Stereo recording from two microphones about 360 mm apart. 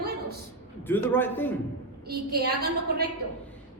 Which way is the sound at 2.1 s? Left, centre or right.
Right.